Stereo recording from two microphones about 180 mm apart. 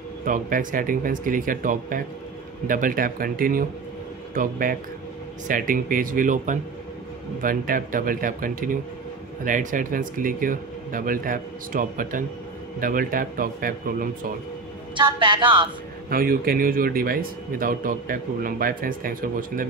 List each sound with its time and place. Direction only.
0.2 s speech: 50° right (ahead or behind)
15.0 s a woman's voice: 25° right (ahead or behind)
16.1 s speech: 55° right (ahead or behind)